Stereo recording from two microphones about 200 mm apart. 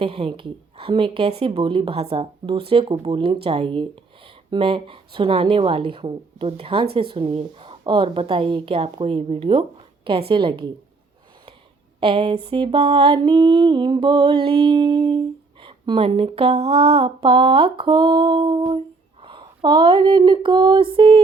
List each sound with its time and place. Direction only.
0.0 s a woman's voice: 25° right (ahead or behind)
11.9 s a woman's voice: 25° right (ahead or behind)
19.2 s a sound: 25° right (ahead or behind)